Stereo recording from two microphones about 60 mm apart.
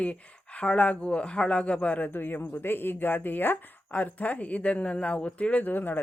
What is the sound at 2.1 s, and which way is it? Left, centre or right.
Speech, left.